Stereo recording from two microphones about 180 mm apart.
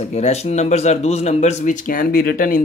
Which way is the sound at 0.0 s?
35° left (ahead or behind).